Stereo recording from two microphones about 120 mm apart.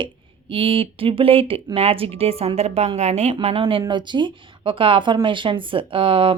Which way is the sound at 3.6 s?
45° right (ahead or behind).